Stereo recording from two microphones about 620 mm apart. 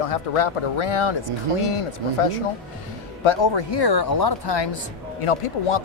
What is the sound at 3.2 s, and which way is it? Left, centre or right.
Speech, left.